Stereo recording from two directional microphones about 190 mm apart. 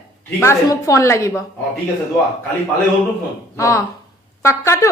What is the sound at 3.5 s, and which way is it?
A woman's voice, 15° left (ahead or behind).